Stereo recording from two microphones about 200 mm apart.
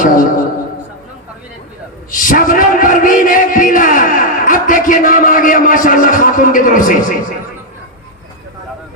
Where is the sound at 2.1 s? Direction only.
40° left (ahead or behind).